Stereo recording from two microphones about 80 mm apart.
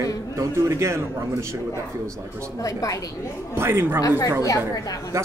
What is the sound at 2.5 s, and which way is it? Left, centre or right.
Speech, left.